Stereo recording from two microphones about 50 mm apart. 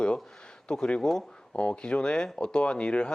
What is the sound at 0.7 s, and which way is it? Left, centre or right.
Speech, centre.